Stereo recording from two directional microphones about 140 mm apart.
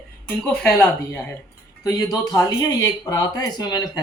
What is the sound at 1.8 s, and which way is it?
Speech, 25° left (ahead or behind).